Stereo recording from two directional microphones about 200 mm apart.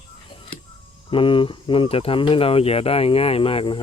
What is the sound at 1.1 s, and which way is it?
Speech, 25° left (ahead or behind).